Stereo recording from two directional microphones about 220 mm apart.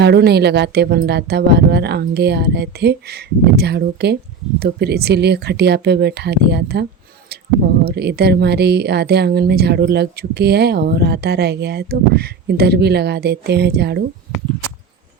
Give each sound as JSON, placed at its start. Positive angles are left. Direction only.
{"t": 0.0, "sound": "speech", "side_deg": -45}
{"t": 7.9, "sound": "speech", "side_deg": -45}